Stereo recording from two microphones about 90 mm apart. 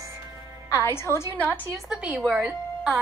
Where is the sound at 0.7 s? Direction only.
30° left (ahead or behind).